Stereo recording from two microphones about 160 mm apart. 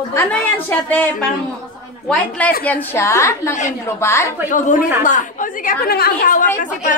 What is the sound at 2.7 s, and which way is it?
A woman's voice, 15° left (ahead or behind).